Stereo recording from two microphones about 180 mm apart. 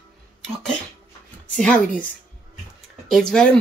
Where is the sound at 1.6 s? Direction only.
5° left (ahead or behind).